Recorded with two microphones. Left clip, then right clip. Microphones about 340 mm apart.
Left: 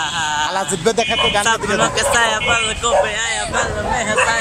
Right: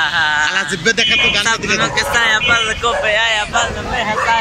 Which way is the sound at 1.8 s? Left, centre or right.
Centre.